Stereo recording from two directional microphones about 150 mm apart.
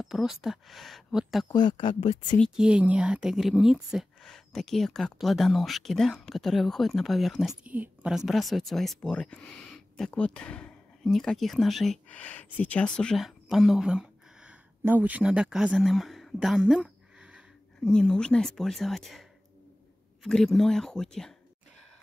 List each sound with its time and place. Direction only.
0.0 s a woman's voice: centre (ahead or behind)
1.5 s speech: 30° left (ahead or behind)
2.3 s a woman's voice: 5° left (ahead or behind)
2.6 s a woman's voice: 10° right (ahead or behind)
7.6 s a woman's voice: 10° right (ahead or behind)
17.8 s a woman's voice: 5° left (ahead or behind)
20.2 s a woman's voice: 5° left (ahead or behind)